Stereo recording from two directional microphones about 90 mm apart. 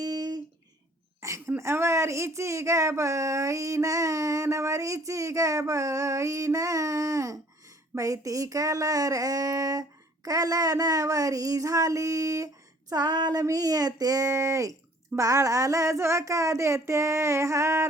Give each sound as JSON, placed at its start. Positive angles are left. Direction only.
{"t": 0.0, "sound": "a sound", "side_deg": -50}
{"t": 1.2, "sound": "speech", "side_deg": -35}
{"t": 12.9, "sound": "female singing", "side_deg": -50}
{"t": 13.4, "sound": "speech", "side_deg": -40}